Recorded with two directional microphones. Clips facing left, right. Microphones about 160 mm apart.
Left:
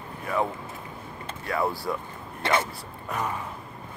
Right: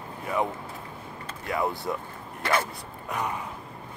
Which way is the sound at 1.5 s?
20° right (ahead or behind).